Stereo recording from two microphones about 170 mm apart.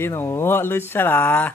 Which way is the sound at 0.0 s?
15° left (ahead or behind).